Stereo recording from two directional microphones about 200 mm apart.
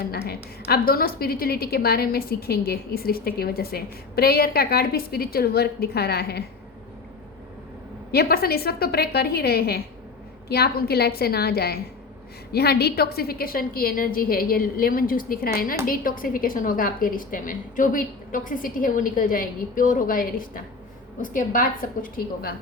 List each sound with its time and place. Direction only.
0.0 s a woman's voice: 50° left (ahead or behind)
8.1 s a woman's voice: 50° left (ahead or behind)